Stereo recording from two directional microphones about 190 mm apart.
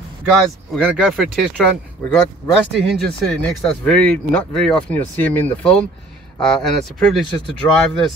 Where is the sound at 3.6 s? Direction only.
Centre (ahead or behind).